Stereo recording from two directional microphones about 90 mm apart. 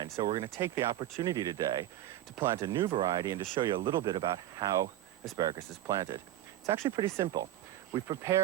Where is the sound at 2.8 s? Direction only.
65° right (ahead or behind).